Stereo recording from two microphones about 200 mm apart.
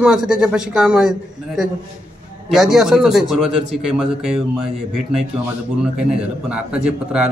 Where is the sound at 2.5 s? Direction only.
Centre (ahead or behind).